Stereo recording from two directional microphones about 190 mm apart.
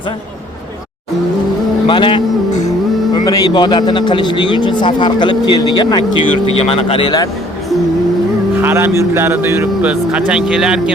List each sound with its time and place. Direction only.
1.9 s speech: 25° left (ahead or behind)
8.6 s speech: 10° right (ahead or behind)